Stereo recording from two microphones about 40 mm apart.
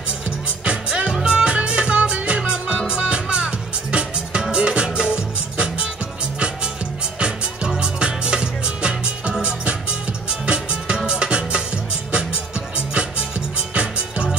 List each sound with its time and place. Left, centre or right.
0.7 s music: right
7.2 s music: right
13.7 s music: right